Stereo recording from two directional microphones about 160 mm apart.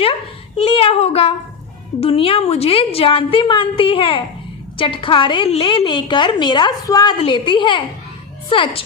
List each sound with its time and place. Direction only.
0.0 s dog: 35° left (ahead or behind)
2.0 s a woman's voice: 35° left (ahead or behind)